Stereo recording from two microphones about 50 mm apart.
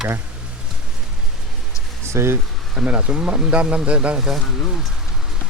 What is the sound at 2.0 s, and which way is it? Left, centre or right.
Speech, right.